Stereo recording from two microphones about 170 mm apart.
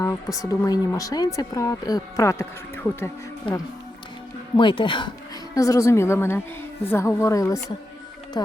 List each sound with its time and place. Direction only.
0.0 s speech: 20° left (ahead or behind)
4.5 s a woman's voice: 30° left (ahead or behind)